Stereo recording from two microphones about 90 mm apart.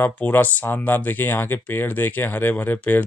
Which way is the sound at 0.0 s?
20° left (ahead or behind).